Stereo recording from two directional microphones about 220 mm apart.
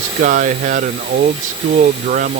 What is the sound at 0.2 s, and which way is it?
Speech, 40° right (ahead or behind).